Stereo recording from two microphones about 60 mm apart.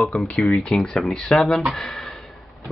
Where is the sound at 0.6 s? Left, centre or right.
Centre.